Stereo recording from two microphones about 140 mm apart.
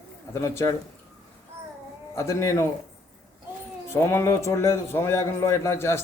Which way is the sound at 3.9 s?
20° left (ahead or behind).